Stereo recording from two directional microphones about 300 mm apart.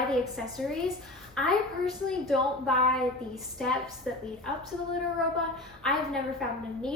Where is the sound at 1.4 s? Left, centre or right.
Centre.